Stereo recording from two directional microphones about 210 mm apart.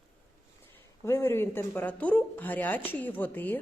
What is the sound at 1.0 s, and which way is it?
Speech, 10° left (ahead or behind).